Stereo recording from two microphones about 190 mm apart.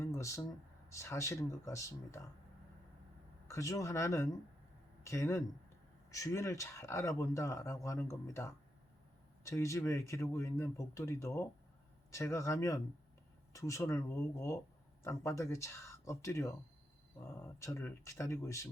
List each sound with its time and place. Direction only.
0.0 s a sound: 15° left (ahead or behind)
0.9 s speech: 15° left (ahead or behind)
3.4 s speech: 15° left (ahead or behind)